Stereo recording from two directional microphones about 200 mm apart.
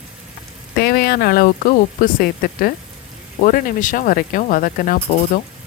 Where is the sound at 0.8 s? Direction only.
50° left (ahead or behind).